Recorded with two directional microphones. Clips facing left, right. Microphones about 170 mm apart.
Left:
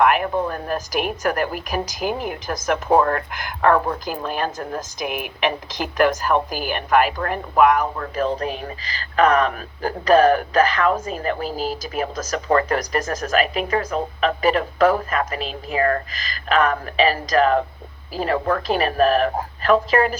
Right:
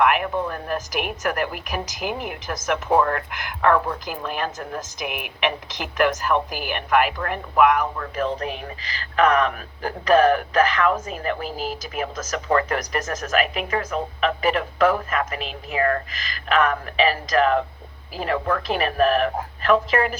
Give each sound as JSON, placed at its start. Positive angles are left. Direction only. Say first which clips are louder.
{"t": 0.0, "sound": "a woman's voice", "louder": "left 2 dB", "side_deg": 35}